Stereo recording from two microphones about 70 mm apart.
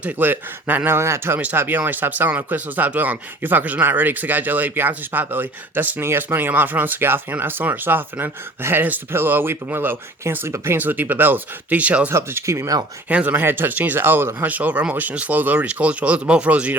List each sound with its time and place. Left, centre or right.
0.0 s speech: right
0.9 s speech: right
1.5 s speech: right
12.1 s speech: right
13.1 s speech: right